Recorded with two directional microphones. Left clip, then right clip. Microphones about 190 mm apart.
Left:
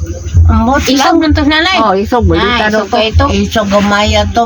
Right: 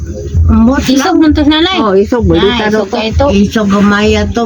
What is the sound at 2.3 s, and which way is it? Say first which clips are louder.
Speech: right 2 dB; 30° left (ahead or behind).